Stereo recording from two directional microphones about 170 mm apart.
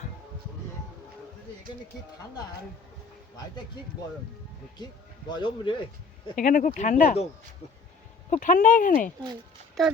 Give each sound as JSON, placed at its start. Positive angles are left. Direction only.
{"t": 5.3, "sound": "speech", "side_deg": 30}
{"t": 6.3, "sound": "speech", "side_deg": 55}
{"t": 8.3, "sound": "speech", "side_deg": 50}